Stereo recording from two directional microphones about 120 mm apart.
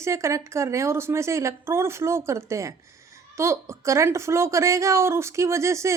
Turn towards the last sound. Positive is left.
turn(degrees=-25)  # may be behind; listen again after turning